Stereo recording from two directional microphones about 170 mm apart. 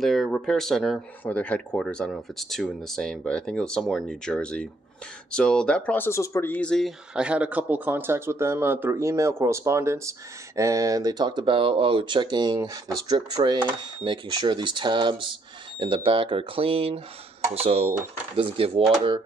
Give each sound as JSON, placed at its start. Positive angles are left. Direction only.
{"t": 0.0, "sound": "speech", "side_deg": 0}